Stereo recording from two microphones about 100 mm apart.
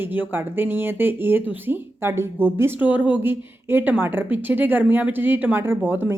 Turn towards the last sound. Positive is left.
turn(degrees=-20)  # may be behind; listen again after turning